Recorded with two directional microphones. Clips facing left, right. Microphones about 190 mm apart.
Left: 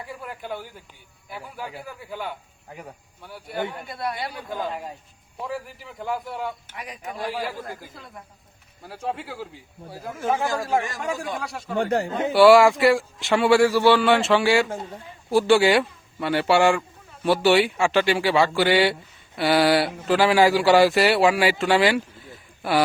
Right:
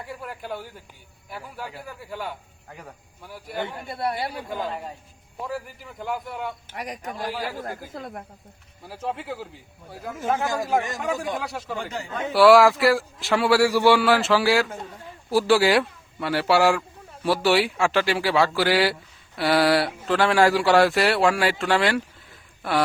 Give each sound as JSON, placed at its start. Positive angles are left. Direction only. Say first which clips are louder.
{"t": 0.2, "sound": "speech", "louder": "even", "side_deg": 0}
{"t": 2.6, "sound": "speech", "louder": "left 3 dB", "side_deg": 10}
{"t": 3.2, "sound": "speech", "louder": "left 1 dB", "side_deg": -5}
{"t": 3.8, "sound": "speech", "louder": "right 2 dB", "side_deg": -30}
{"t": 4.4, "sound": "speech", "louder": "even", "side_deg": 0}
{"t": 7.7, "sound": "speech", "louder": "right 5 dB", "side_deg": -60}
{"t": 8.8, "sound": "speech", "louder": "left 1 dB", "side_deg": 0}
{"t": 10.4, "sound": "speech", "louder": "even", "side_deg": -20}
{"t": 11.0, "sound": "speech", "louder": "right 1 dB", "side_deg": 0}
{"t": 11.8, "sound": "speech", "louder": "left 10 dB", "side_deg": 60}
{"t": 12.3, "sound": "speech", "louder": "left 1 dB", "side_deg": 0}